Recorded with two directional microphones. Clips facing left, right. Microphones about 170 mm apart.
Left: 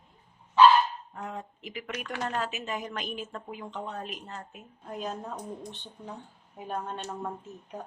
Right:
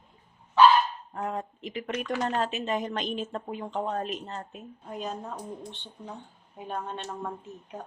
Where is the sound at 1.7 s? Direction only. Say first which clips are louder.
Right 6 dB; 30° right (ahead or behind).